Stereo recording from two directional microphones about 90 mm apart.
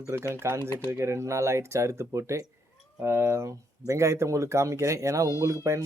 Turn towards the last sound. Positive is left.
turn(degrees=-35)  # may be behind; listen again after turning